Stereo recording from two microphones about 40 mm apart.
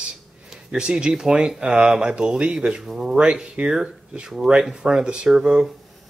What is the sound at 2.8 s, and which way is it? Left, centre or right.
Speech, centre.